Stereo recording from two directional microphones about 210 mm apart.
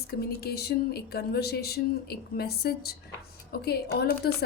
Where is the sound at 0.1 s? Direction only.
45° left (ahead or behind).